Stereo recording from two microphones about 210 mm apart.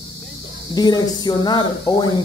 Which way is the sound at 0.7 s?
20° left (ahead or behind).